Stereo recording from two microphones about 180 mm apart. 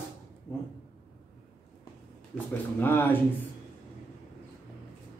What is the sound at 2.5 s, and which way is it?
Speech, 10° left (ahead or behind).